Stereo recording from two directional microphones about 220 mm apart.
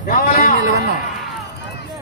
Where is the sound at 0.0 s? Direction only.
40° left (ahead or behind).